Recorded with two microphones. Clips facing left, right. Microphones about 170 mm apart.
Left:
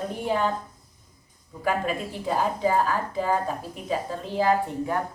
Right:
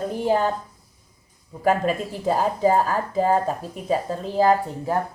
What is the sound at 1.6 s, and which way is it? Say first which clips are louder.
Speech: right 5 dB; 40° right (ahead or behind).